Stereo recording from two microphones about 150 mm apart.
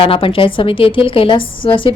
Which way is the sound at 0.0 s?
35° left (ahead or behind).